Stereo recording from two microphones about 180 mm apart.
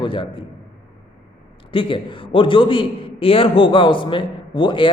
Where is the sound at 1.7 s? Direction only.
30° left (ahead or behind).